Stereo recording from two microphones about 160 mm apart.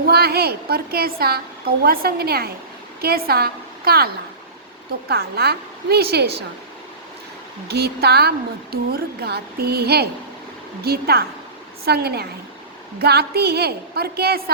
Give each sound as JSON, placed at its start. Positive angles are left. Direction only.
{"t": 0.1, "sound": "a woman's voice", "side_deg": -75}
{"t": 7.7, "sound": "a woman's voice", "side_deg": -90}
{"t": 10.8, "sound": "a woman's voice", "side_deg": -75}